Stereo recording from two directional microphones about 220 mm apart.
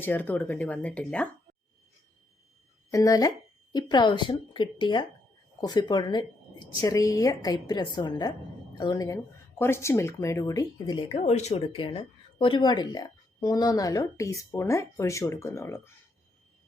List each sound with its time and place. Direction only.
0.0 s speech: 10° left (ahead or behind)
2.9 s speech: 15° left (ahead or behind)